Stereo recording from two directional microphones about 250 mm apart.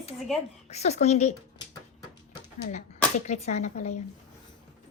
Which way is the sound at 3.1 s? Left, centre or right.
Left.